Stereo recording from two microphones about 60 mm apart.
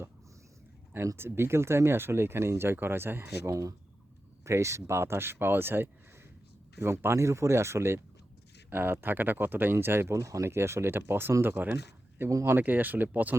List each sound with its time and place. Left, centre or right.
1.1 s speech: right
3.5 s speech: right
4.4 s speech: right
10.2 s speech: right